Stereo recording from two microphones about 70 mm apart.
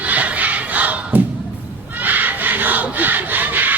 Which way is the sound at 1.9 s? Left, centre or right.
Right.